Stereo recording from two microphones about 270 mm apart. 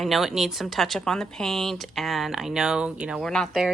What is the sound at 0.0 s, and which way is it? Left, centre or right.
Speech, centre.